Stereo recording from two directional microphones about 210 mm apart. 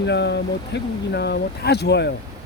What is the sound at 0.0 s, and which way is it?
Speech, 55° left (ahead or behind).